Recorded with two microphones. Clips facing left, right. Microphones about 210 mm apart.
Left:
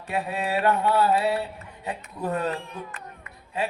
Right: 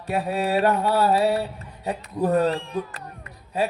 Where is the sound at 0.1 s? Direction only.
35° right (ahead or behind).